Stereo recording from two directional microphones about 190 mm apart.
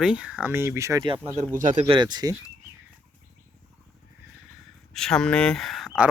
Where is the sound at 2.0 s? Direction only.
20° right (ahead or behind).